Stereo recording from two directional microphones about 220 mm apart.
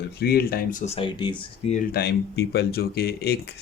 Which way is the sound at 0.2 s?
45° left (ahead or behind).